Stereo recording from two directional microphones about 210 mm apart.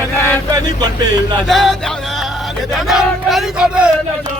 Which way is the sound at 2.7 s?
Centre (ahead or behind).